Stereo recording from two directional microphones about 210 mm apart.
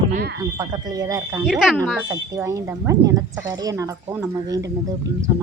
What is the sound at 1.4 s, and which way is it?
Speech, 5° right (ahead or behind).